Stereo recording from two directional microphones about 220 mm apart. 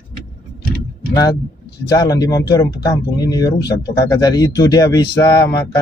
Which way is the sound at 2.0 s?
15° left (ahead or behind).